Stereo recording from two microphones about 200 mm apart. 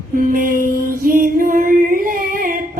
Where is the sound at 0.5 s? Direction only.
45° left (ahead or behind).